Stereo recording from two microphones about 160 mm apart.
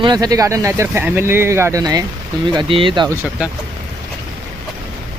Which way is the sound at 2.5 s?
30° right (ahead or behind).